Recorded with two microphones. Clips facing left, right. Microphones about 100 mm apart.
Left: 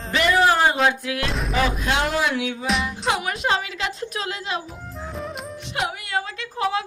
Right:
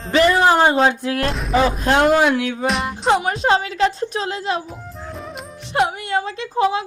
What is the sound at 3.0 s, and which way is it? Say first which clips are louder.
A woman's voice: right 10 dB; 35° right (ahead or behind).